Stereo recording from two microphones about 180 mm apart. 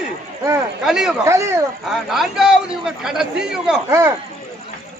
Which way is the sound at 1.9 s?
Centre (ahead or behind).